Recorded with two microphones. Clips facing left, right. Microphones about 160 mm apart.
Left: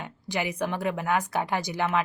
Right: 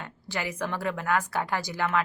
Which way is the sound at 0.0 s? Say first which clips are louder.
Left 3 dB; 15° left (ahead or behind).